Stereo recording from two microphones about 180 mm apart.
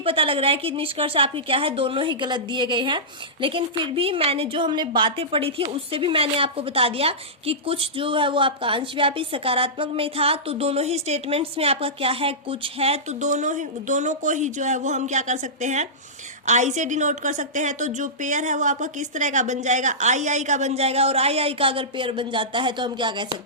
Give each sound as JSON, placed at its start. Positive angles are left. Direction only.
{"t": 0.0, "sound": "a woman's voice", "side_deg": -30}